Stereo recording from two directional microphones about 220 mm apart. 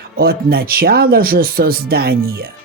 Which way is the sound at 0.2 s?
45° right (ahead or behind).